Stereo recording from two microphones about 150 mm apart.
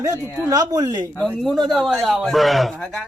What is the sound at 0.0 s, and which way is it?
A man's voice, 20° right (ahead or behind).